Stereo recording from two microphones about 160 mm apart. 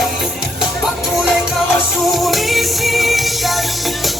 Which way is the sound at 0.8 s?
Centre (ahead or behind).